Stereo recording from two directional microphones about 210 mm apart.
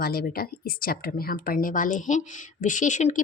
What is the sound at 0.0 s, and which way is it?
Speech, 45° left (ahead or behind).